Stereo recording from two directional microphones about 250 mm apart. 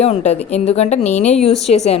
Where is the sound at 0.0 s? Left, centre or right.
Left.